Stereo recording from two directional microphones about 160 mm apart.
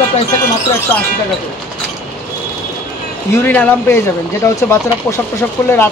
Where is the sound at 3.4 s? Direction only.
10° left (ahead or behind).